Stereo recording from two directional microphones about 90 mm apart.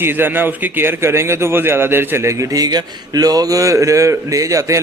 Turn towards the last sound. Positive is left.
turn(degrees=-35)  # may be behind; listen again after turning